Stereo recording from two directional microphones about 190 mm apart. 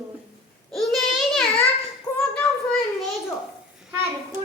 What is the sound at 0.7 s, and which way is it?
Child singing, centre (ahead or behind).